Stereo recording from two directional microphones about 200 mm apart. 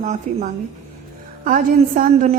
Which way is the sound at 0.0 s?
35° right (ahead or behind).